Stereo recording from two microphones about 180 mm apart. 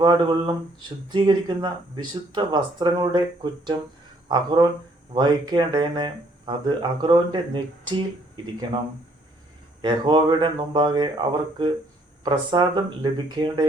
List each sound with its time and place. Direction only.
0.0 s speech: 25° right (ahead or behind)
9.8 s speech: 25° right (ahead or behind)